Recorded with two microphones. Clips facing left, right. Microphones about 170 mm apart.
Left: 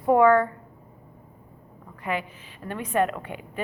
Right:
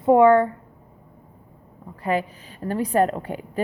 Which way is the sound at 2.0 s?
35° right (ahead or behind).